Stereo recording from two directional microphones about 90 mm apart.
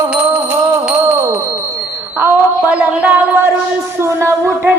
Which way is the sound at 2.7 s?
15° right (ahead or behind).